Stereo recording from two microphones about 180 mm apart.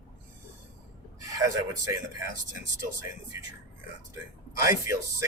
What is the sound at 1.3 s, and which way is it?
Speech, 20° right (ahead or behind).